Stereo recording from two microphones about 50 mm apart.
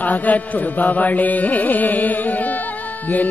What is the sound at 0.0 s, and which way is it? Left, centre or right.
Mantra, left.